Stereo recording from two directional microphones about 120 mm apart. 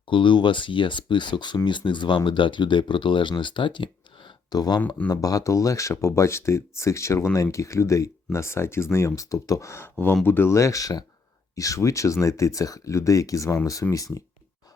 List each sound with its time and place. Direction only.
0.1 s speech: 45° left (ahead or behind)
4.4 s speech: 35° left (ahead or behind)